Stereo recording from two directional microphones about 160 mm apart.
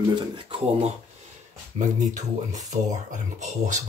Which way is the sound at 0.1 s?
35° right (ahead or behind).